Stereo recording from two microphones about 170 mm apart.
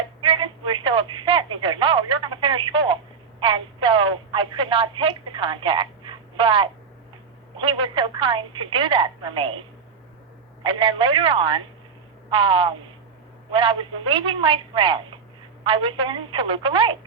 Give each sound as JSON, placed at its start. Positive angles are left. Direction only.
{"t": 0.2, "sound": "telephone", "side_deg": -30}
{"t": 7.5, "sound": "a woman's voice", "side_deg": -30}